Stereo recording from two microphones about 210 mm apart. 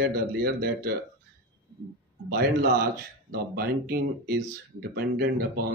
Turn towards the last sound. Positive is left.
turn(degrees=-50)  # may be behind; listen again after turning